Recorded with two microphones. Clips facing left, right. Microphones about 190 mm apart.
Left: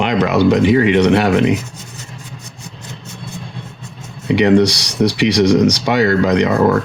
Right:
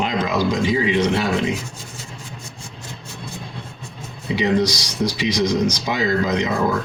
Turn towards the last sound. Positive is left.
turn(degrees=70)  # may be behind; listen again after turning